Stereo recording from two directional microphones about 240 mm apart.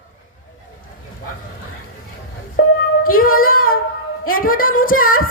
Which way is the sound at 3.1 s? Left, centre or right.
Left.